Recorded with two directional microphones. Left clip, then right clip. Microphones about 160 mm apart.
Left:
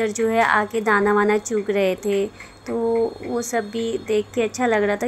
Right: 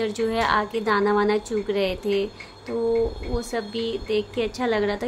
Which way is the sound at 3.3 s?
25° left (ahead or behind).